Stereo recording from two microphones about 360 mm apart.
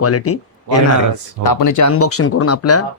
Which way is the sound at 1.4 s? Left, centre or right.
Left.